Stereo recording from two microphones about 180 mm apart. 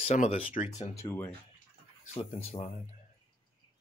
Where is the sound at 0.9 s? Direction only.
15° left (ahead or behind).